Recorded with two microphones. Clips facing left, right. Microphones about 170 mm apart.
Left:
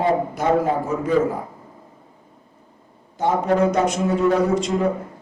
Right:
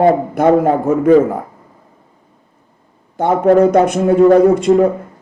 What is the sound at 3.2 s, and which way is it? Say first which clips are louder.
A man's voice: right 8 dB; 55° right (ahead or behind).